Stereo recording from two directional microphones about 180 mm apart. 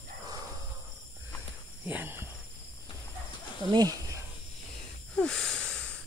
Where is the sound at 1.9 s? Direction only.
10° right (ahead or behind).